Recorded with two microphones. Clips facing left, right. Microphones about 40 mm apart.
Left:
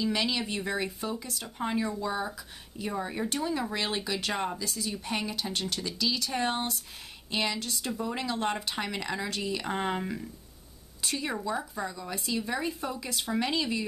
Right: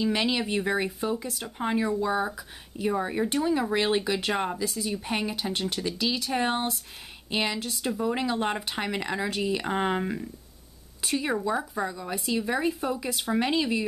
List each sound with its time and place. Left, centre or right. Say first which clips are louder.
0.0 s speech: right 3 dB; centre